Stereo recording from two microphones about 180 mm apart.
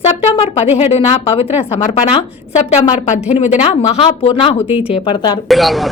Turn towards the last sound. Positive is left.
turn(degrees=0)  # may be behind; listen again after turning